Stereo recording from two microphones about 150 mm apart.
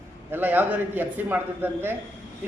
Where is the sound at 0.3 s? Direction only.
10° right (ahead or behind).